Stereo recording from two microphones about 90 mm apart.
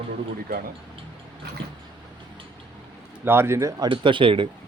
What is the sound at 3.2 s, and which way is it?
Speech, 25° right (ahead or behind).